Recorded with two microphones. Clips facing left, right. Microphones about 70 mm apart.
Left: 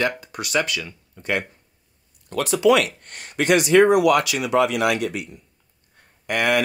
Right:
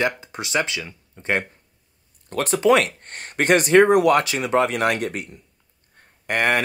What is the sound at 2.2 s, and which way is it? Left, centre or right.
Speech, right.